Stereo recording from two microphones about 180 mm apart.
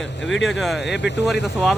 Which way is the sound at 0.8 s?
75° left (ahead or behind).